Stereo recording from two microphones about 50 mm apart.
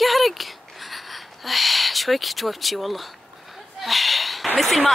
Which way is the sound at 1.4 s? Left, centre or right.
Centre.